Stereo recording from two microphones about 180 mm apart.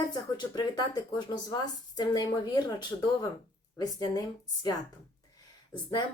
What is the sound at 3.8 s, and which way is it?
Speech, 20° left (ahead or behind).